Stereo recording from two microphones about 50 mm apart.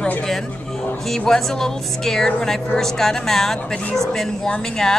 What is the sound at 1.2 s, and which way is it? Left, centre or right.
A woman's voice, centre.